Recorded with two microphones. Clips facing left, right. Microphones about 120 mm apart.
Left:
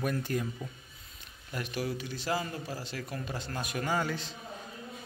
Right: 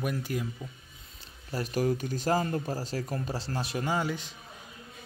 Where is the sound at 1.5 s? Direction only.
40° right (ahead or behind); by 4.3 s 15° right (ahead or behind).